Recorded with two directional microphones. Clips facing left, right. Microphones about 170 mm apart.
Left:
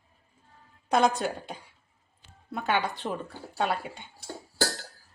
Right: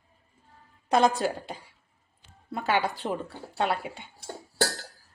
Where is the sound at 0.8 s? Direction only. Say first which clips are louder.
Right 1 dB; centre (ahead or behind).